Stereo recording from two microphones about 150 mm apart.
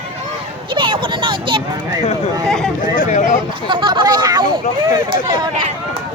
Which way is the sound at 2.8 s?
65° left (ahead or behind).